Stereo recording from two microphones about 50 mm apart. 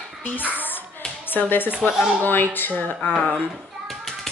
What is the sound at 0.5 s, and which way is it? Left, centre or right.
Hands, left.